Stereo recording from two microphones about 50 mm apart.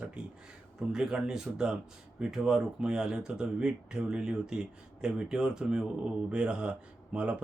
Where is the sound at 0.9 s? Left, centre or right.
Centre.